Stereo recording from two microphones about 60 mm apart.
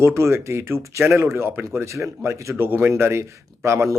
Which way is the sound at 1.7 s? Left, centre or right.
Right.